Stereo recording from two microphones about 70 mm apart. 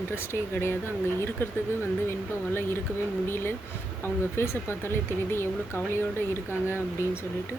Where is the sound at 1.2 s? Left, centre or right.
Left.